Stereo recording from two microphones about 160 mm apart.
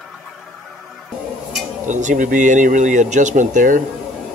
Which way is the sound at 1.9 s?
50° right (ahead or behind).